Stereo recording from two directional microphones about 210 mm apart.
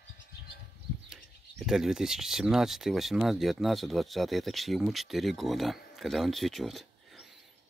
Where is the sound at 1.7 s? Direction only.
Centre (ahead or behind).